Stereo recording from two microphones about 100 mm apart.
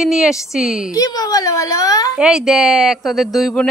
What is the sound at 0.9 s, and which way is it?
A woman's voice, 40° left (ahead or behind).